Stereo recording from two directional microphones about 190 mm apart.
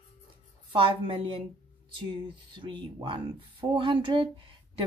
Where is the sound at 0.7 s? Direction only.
25° right (ahead or behind).